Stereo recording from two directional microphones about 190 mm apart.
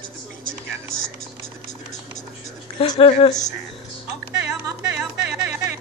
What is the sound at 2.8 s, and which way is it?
Speech, 30° left (ahead or behind).